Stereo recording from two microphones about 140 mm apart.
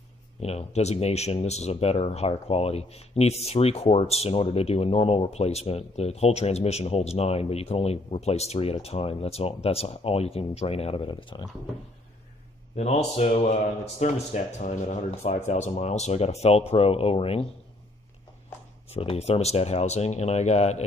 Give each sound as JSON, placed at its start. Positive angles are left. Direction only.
{"t": 0.4, "sound": "speech", "side_deg": 50}
{"t": 12.7, "sound": "speech", "side_deg": 45}
{"t": 18.9, "sound": "speech", "side_deg": 45}